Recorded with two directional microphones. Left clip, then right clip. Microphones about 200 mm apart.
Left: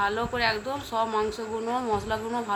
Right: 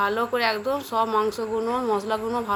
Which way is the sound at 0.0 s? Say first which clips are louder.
Right 3 dB; 25° right (ahead or behind).